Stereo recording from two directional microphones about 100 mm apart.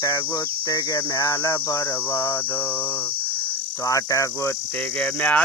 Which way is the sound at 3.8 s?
30° left (ahead or behind).